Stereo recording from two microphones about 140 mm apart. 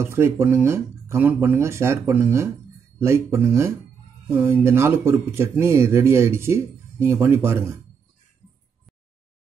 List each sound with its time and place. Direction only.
0.0 s speech: 20° right (ahead or behind)